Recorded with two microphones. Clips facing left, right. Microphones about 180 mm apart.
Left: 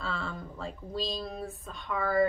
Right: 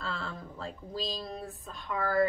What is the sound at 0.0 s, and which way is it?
A woman's voice, centre (ahead or behind).